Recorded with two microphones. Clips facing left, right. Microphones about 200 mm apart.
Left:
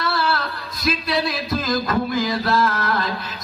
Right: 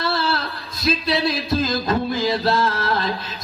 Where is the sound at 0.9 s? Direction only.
25° right (ahead or behind).